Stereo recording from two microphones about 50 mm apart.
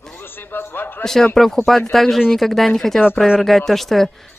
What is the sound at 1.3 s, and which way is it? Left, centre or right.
Speech, centre.